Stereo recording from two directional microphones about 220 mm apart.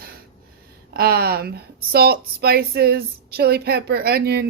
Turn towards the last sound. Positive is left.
turn(degrees=-45)  # may be behind; listen again after turning